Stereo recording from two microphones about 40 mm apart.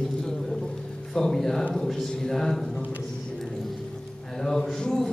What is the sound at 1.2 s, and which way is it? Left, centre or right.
Speech, centre.